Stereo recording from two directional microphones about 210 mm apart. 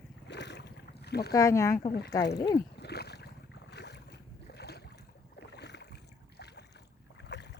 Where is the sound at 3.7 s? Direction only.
55° left (ahead or behind).